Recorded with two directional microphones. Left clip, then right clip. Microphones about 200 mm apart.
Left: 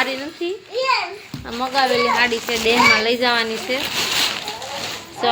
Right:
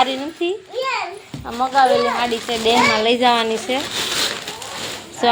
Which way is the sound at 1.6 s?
5° left (ahead or behind).